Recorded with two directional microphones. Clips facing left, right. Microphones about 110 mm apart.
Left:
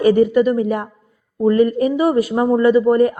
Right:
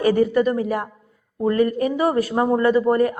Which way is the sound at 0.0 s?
20° left (ahead or behind).